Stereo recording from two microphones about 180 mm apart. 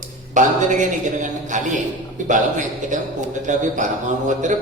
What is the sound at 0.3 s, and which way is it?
A man's voice, 45° right (ahead or behind).